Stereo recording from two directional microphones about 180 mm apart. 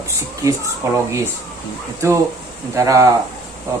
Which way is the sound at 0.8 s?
15° right (ahead or behind).